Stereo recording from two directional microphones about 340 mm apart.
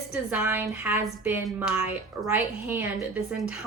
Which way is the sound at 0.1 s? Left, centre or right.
Centre.